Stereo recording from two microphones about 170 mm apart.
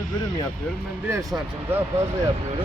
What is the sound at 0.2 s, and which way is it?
Speech, 25° left (ahead or behind).